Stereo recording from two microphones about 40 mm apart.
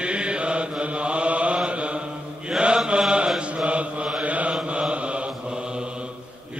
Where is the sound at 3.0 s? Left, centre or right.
Right.